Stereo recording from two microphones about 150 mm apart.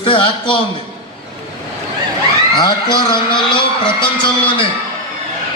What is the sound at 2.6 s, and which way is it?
A man's voice, 30° left (ahead or behind).